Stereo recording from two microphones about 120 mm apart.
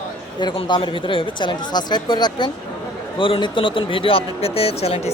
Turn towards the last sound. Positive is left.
turn(degrees=55)  # may be behind; listen again after turning